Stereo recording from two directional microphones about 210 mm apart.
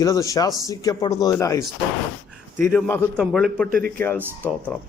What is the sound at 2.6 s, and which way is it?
A man's voice, 10° left (ahead or behind).